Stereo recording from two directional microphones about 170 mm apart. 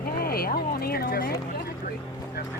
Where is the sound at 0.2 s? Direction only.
60° left (ahead or behind).